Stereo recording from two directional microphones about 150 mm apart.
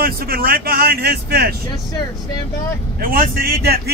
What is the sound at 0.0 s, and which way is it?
Speech, 80° right.